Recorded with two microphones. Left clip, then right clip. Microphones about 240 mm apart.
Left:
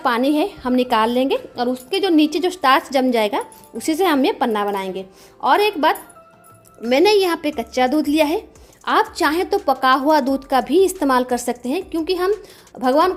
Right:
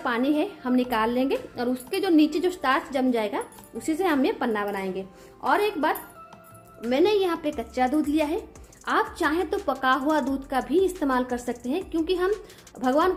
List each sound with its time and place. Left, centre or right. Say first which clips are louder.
0.0 s a woman's voice: left 7 dB; left